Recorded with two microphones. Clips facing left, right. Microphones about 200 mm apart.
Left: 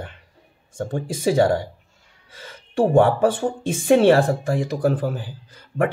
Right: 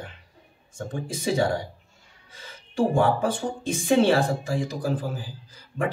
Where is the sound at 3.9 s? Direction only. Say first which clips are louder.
Left 5 dB; 60° left (ahead or behind).